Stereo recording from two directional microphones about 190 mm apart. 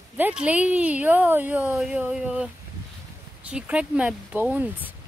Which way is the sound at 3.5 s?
5° right (ahead or behind).